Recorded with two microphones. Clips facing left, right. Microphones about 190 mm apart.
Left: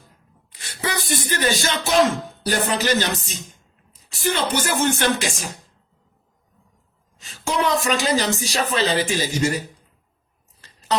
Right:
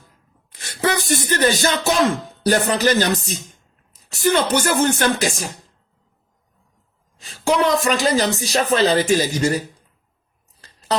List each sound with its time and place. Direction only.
0.6 s speech: 50° right (ahead or behind)
7.2 s speech: 35° right (ahead or behind)
10.6 s a sound: 35° right (ahead or behind)